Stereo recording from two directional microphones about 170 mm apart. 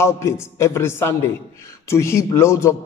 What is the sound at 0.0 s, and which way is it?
A man's voice, 15° left (ahead or behind).